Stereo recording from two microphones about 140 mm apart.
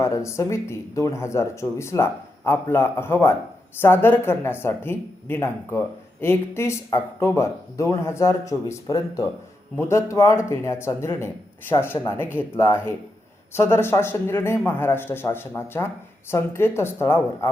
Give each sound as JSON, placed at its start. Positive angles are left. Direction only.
{"t": 0.0, "sound": "a woman's voice", "side_deg": 20}